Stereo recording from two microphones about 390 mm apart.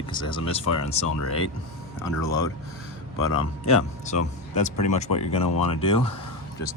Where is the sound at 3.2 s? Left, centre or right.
Left.